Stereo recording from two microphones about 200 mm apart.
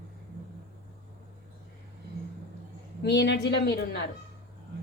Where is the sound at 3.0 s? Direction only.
60° left (ahead or behind).